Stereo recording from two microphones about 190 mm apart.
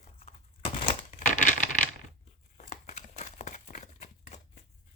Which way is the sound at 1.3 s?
40° left (ahead or behind).